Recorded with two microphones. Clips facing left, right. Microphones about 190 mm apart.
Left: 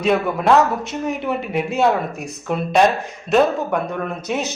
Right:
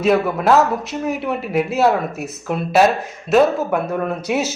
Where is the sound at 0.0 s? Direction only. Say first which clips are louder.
Right 2 dB; centre (ahead or behind).